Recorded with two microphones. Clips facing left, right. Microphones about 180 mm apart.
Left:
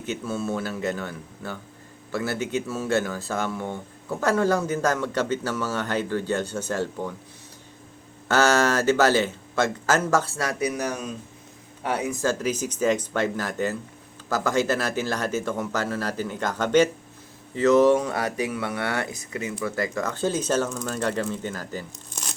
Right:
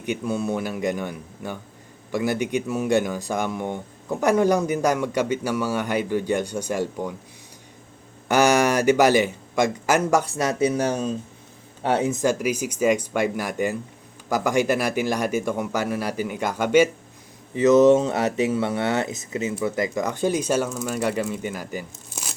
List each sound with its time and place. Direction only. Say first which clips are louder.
0.0 s speech: right 3 dB; 15° right (ahead or behind)
8.3 s speech: right 2 dB; 15° right (ahead or behind)